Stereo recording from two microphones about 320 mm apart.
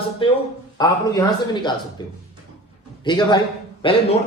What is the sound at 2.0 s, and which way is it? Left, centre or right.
A man's voice, centre.